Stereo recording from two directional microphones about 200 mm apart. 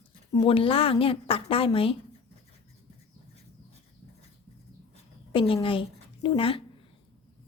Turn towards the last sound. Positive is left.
turn(degrees=25)  # may be behind; listen again after turning